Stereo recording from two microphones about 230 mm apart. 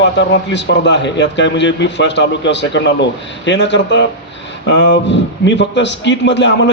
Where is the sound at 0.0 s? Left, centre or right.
Left.